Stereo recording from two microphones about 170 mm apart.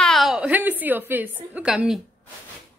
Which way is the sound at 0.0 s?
Centre (ahead or behind).